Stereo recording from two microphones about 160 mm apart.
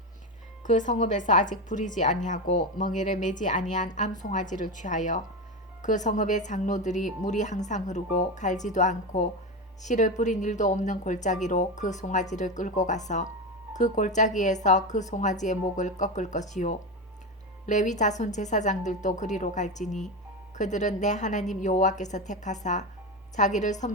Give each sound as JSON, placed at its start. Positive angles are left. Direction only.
{"t": 0.6, "sound": "a woman's voice", "side_deg": 50}